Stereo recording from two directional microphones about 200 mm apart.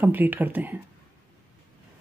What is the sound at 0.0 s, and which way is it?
Speech, 10° right (ahead or behind).